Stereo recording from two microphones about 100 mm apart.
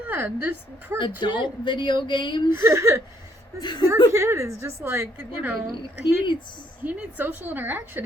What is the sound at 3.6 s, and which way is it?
Speech, 50° left (ahead or behind).